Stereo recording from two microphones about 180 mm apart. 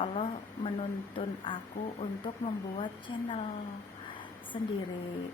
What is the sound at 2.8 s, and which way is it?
Speech, 30° left (ahead or behind).